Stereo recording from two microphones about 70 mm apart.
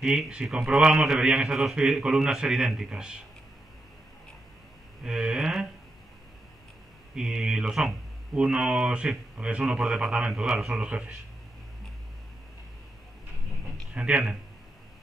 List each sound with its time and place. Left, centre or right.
0.0 s a man's voice: centre
5.0 s a man's voice: centre
7.2 s a man's voice: centre
10.7 s a man's voice: centre
13.9 s a man's voice: centre